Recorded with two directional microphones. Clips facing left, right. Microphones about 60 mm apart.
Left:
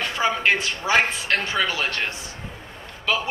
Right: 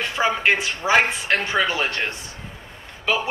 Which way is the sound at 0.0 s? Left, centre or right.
Centre.